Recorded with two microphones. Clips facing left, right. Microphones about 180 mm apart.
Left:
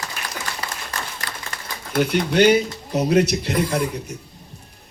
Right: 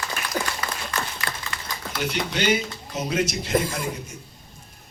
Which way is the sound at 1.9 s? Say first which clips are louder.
Left 8 dB; 50° left (ahead or behind).